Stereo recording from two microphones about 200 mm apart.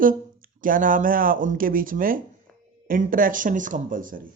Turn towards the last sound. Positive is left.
turn(degrees=-40)  # may be behind; listen again after turning